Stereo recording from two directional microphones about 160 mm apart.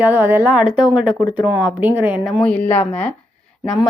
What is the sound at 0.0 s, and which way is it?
A woman's voice, 10° right (ahead or behind).